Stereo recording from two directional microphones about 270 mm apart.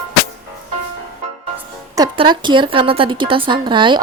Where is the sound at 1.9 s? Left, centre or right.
Centre.